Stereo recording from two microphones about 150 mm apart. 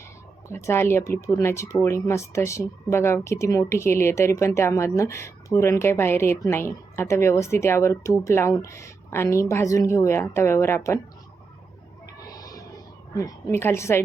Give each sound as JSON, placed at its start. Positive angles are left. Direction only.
{"t": 0.4, "sound": "speech", "side_deg": 15}
{"t": 12.2, "sound": "music", "side_deg": 25}
{"t": 13.1, "sound": "a woman's voice", "side_deg": 20}